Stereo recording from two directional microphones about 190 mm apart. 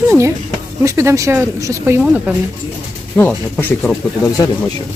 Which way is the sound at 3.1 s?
10° left (ahead or behind).